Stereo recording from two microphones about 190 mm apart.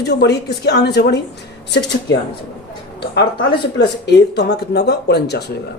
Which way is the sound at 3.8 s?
65° left (ahead or behind).